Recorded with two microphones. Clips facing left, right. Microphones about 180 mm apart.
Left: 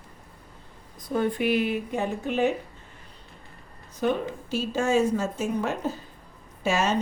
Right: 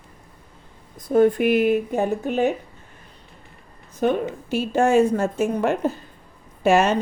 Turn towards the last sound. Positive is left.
turn(degrees=-60)  # may be behind; listen again after turning